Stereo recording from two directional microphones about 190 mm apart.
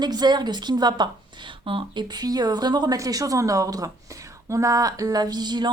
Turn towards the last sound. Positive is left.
turn(degrees=-20)  # may be behind; listen again after turning